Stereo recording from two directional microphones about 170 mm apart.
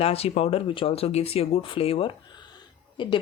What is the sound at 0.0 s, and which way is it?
Speech, 35° left (ahead or behind).